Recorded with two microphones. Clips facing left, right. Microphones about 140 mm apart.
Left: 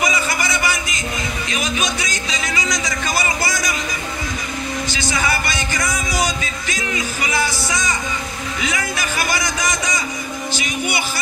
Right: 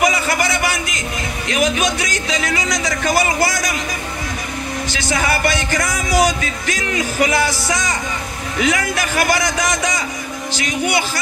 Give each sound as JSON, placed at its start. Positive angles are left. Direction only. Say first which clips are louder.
{"t": 0.0, "sound": "a sound", "louder": "right 4 dB", "side_deg": -65}
{"t": 1.5, "sound": "speech", "louder": "right 7 dB", "side_deg": -60}
{"t": 4.9, "sound": "a man's voice", "louder": "right 3 dB", "side_deg": -65}
{"t": 5.7, "sound": "music", "louder": "right 4 dB", "side_deg": -65}
{"t": 8.5, "sound": "music", "louder": "right 7 dB", "side_deg": -60}
{"t": 10.5, "sound": "a man's voice", "louder": "right 5 dB", "side_deg": -90}